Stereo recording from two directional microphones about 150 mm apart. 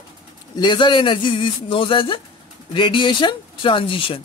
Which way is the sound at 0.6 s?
30° left (ahead or behind).